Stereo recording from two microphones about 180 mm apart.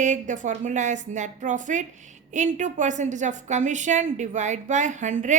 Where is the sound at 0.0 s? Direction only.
45° right (ahead or behind).